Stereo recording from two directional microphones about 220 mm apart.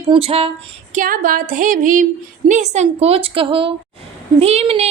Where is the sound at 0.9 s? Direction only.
40° right (ahead or behind).